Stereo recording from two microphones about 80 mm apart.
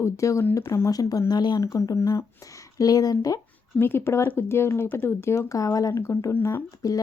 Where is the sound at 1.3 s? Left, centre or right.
Left.